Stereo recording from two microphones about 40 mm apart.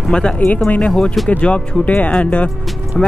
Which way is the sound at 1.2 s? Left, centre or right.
Left.